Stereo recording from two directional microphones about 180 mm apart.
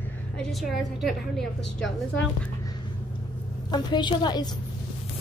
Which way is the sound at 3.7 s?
25° left (ahead or behind).